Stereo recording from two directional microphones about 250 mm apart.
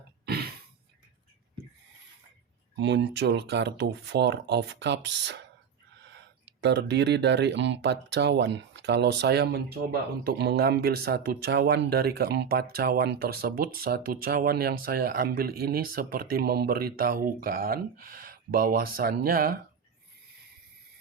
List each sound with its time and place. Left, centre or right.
2.7 s speech: right
6.4 s speech: right